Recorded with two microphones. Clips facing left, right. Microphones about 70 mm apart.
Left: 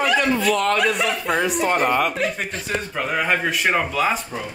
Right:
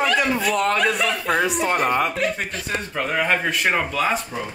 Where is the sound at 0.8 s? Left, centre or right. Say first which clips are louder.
Even; centre.